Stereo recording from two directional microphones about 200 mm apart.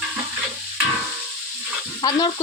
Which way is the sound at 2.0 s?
20° left (ahead or behind).